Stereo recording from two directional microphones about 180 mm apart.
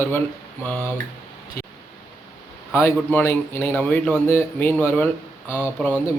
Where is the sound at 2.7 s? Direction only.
10° left (ahead or behind).